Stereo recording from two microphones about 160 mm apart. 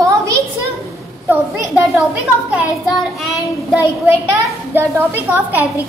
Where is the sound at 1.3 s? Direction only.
15° right (ahead or behind).